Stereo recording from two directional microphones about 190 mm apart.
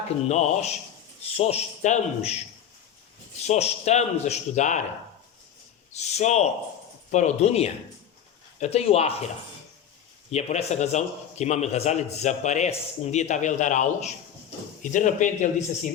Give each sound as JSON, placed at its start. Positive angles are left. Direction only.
{"t": 0.3, "sound": "speech", "side_deg": 35}
{"t": 3.4, "sound": "speech", "side_deg": 35}
{"t": 6.0, "sound": "speech", "side_deg": 35}
{"t": 10.3, "sound": "speech", "side_deg": 35}